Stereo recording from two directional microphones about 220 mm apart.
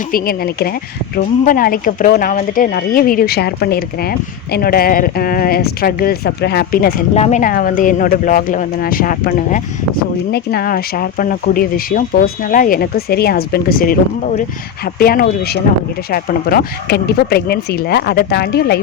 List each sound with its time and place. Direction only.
0.1 s speech: 45° left (ahead or behind)
7.1 s speech: 30° left (ahead or behind); by 18.8 s 45° left (ahead or behind)